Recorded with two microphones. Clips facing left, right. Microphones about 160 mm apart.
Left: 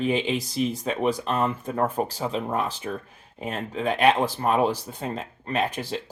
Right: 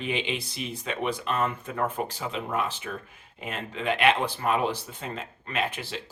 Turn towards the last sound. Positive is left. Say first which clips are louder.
# left 4 dB
turn(degrees=40)  # may be behind; listen again after turning